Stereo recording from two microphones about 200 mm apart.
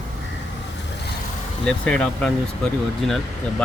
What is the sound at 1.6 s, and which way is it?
Speech, 5° left (ahead or behind).